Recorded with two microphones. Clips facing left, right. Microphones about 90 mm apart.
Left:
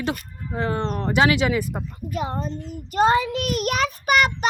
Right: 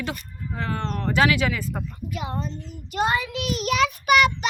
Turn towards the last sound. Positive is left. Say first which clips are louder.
# right 1 dB
turn(degrees=40)  # may be behind; listen again after turning